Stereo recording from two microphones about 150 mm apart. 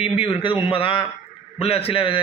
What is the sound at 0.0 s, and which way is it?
Speech, 40° left (ahead or behind).